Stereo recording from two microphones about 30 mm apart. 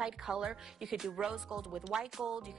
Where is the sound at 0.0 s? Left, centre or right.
Right.